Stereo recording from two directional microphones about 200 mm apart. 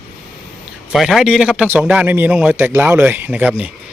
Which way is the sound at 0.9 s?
Centre (ahead or behind).